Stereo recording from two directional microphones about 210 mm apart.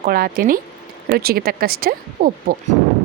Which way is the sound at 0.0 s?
45° right (ahead or behind).